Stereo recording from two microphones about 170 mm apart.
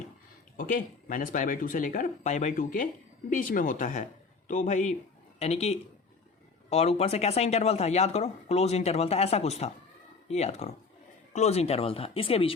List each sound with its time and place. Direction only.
0.5 s speech: 55° left (ahead or behind); by 12.5 s 35° left (ahead or behind)